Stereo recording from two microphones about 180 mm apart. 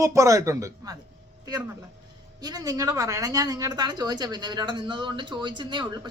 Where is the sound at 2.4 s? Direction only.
20° right (ahead or behind).